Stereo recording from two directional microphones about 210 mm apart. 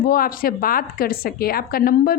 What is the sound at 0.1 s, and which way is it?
A woman's voice, 45° left (ahead or behind).